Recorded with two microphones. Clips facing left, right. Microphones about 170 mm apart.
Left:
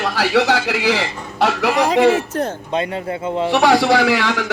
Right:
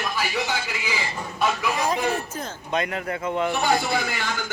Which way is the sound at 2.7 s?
30° left (ahead or behind).